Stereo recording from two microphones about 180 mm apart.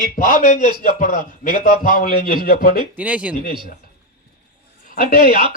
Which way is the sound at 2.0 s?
55° left (ahead or behind).